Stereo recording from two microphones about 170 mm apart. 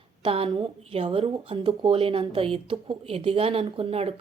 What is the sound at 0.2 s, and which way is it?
A woman's voice, 35° right (ahead or behind).